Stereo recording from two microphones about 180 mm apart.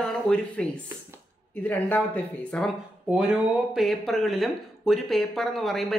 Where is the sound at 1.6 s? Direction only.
10° left (ahead or behind).